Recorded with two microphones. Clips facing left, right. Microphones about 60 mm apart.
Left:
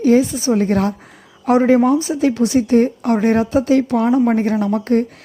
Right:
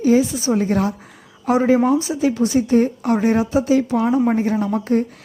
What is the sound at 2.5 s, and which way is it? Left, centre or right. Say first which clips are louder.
A woman's voice: left 2 dB; left.